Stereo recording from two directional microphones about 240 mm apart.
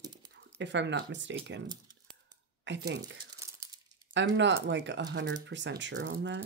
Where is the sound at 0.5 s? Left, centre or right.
Right.